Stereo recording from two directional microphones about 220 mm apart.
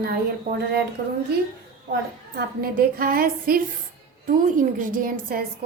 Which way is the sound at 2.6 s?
40° right (ahead or behind).